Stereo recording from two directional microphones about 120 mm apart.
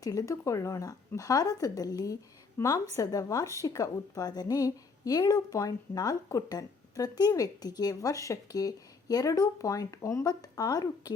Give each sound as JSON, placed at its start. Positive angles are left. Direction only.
{"t": 0.0, "sound": "speech", "side_deg": 30}